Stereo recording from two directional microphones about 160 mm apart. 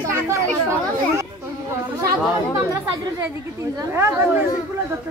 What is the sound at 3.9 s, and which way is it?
Speech, 10° right (ahead or behind).